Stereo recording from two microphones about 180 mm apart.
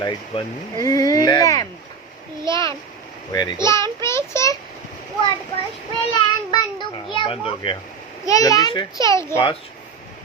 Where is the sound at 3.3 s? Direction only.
20° left (ahead or behind).